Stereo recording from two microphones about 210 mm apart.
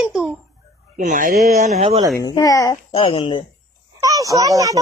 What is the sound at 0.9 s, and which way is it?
Speech, 40° right (ahead or behind).